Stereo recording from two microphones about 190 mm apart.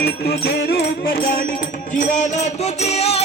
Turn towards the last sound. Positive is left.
turn(degrees=35)  # may be behind; listen again after turning